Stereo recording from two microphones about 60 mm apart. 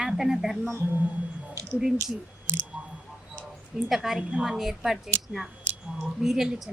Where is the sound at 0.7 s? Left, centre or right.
Right.